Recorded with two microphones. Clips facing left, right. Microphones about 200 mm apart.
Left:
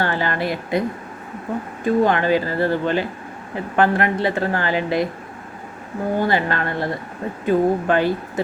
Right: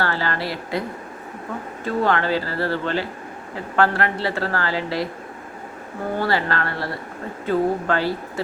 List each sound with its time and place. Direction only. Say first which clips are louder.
0.0 s a woman's voice: left 2 dB; 20° left (ahead or behind)
6.1 s a woman's voice: left 2 dB; 20° left (ahead or behind)